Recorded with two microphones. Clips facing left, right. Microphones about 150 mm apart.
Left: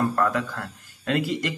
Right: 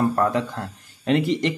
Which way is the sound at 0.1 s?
30° right (ahead or behind).